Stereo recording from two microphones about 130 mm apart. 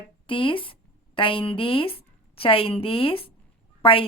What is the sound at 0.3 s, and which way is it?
A woman's voice, 40° left (ahead or behind).